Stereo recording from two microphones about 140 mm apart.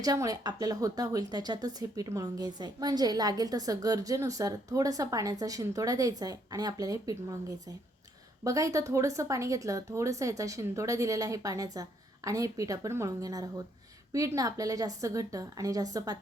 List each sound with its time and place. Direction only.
0.0 s a woman's voice: 25° right (ahead or behind)
8.4 s a woman's voice: 25° right (ahead or behind)